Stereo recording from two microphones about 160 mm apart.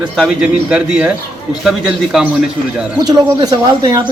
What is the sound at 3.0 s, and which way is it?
Speech, 25° right (ahead or behind).